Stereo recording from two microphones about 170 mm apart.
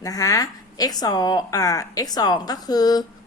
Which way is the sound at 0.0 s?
20° left (ahead or behind).